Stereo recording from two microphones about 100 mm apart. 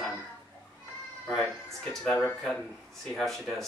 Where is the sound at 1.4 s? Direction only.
5° left (ahead or behind).